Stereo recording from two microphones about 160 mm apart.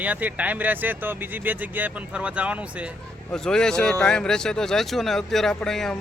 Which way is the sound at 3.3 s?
5° left (ahead or behind).